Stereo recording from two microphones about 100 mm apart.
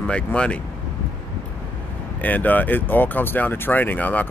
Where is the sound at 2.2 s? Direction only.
15° left (ahead or behind).